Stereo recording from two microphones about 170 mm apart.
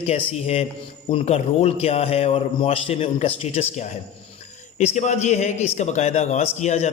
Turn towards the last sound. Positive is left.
turn(degrees=40)  # may be behind; listen again after turning